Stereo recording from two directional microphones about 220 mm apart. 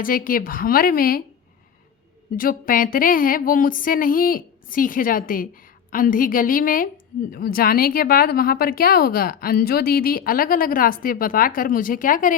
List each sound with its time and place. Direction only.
0.0 s speech: 40° left (ahead or behind)
2.3 s speech: 40° left (ahead or behind)